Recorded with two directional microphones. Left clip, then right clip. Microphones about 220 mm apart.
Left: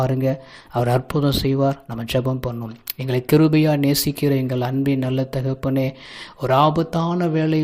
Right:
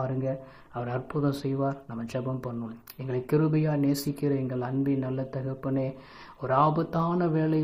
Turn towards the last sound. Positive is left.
turn(degrees=30)  # may be behind; listen again after turning